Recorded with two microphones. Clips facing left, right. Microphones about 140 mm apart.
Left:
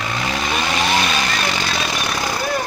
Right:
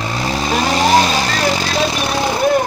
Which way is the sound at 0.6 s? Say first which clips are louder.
Right 8 dB; 35° right (ahead or behind).